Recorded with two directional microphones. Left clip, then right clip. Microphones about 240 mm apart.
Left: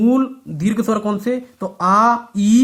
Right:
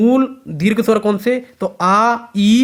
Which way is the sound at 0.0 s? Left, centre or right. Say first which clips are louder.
Right 3 dB; right.